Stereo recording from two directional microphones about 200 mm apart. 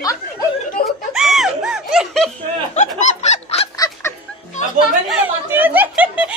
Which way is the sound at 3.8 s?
15° left (ahead or behind).